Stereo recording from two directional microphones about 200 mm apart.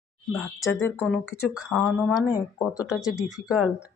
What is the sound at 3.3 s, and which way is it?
Speech, 5° right (ahead or behind).